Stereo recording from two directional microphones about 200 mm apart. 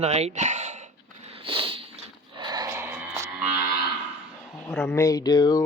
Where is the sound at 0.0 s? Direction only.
35° right (ahead or behind).